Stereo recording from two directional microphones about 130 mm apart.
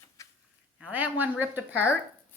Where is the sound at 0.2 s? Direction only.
25° left (ahead or behind).